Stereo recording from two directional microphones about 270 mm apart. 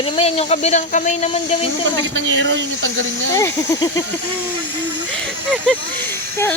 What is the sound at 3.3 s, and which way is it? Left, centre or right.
Speech, centre.